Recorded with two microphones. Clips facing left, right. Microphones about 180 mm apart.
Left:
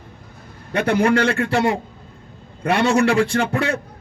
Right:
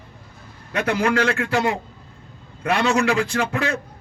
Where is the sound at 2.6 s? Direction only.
30° left (ahead or behind).